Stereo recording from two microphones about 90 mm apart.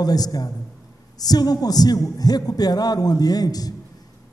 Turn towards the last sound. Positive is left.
turn(degrees=45)  # may be behind; listen again after turning